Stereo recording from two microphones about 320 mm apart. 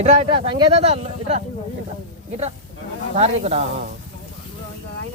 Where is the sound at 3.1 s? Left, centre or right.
Centre.